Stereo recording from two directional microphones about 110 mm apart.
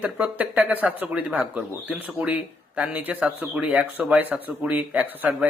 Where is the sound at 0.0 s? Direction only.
10° right (ahead or behind).